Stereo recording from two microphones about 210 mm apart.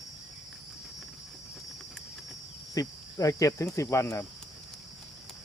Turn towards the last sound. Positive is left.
turn(degrees=15)  # may be behind; listen again after turning